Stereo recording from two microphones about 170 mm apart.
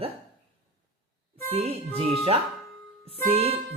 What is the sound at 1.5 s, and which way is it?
Speech, 35° right (ahead or behind).